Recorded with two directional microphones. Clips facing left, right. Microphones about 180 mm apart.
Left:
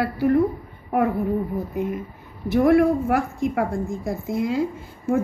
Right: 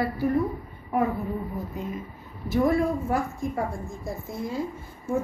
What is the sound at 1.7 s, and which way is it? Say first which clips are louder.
Speech: left 7 dB; 60° left (ahead or behind).